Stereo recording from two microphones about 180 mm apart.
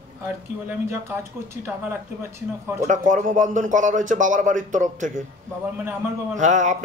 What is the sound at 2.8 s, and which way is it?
Speech, 45° right (ahead or behind).